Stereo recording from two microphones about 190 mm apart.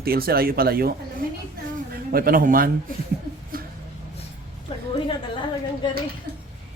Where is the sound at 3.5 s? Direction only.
50° right (ahead or behind).